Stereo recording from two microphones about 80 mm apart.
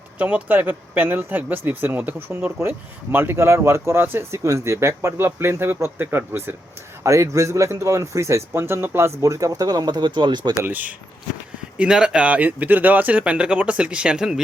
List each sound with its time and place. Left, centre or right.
0.2 s speech: centre; by 10.5 s right
10.7 s speech: centre
11.8 s speech: centre